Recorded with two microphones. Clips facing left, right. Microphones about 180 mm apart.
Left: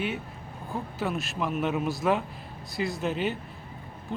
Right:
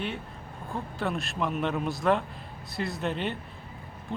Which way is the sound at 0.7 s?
5° left (ahead or behind).